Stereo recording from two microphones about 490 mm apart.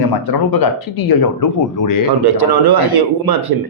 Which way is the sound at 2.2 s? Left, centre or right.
Right.